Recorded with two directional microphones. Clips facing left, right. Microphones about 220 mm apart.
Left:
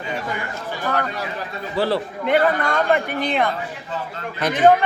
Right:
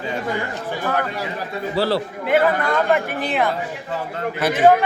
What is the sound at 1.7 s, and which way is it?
Speech, 40° right (ahead or behind).